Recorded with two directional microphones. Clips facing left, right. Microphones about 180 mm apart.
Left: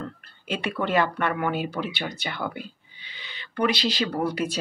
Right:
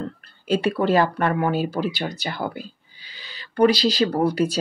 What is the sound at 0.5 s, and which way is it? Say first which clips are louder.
Speech: right 7 dB; 35° right (ahead or behind).